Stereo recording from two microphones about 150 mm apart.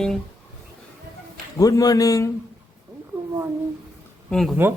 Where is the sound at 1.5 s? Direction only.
25° left (ahead or behind).